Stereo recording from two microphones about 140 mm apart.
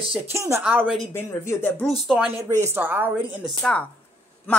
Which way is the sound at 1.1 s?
15° left (ahead or behind).